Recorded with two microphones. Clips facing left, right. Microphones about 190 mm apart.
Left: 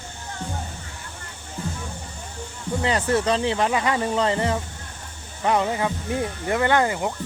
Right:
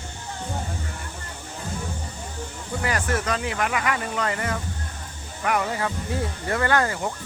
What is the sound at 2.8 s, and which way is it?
Speech, 20° left (ahead or behind).